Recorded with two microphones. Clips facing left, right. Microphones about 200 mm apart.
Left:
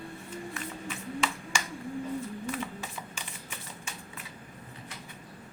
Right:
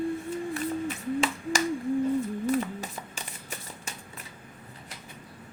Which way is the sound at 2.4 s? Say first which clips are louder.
Right 8 dB; 40° right (ahead or behind).